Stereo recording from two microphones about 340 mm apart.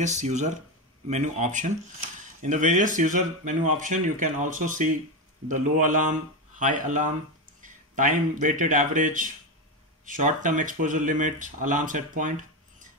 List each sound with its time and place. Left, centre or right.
0.0 s speech: right